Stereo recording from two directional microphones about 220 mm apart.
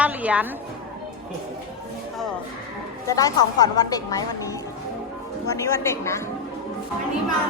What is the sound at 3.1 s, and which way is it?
Speech, 15° left (ahead or behind).